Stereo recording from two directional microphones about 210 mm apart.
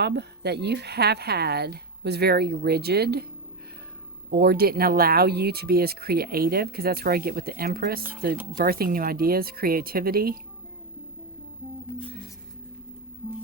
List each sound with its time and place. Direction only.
0.0 s speech: 50° right (ahead or behind)
4.3 s speech: 50° right (ahead or behind)